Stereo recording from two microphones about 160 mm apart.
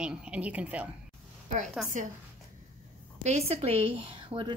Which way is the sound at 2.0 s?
50° right (ahead or behind).